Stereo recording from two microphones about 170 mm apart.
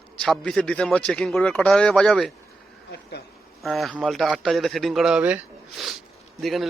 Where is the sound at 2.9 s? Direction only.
75° left (ahead or behind).